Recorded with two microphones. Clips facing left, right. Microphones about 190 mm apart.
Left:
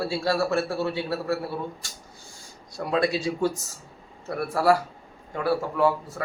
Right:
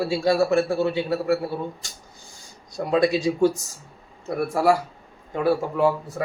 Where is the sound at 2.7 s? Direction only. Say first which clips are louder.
Right 4 dB; 20° right (ahead or behind).